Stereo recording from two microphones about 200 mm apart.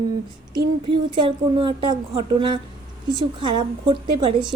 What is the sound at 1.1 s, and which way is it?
Speech, 25° right (ahead or behind).